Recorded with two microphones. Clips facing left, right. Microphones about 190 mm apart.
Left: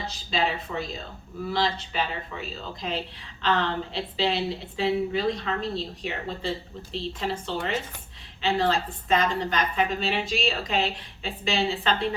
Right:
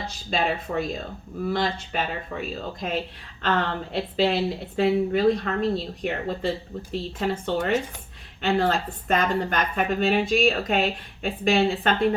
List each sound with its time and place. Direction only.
0.3 s speech: 50° right (ahead or behind)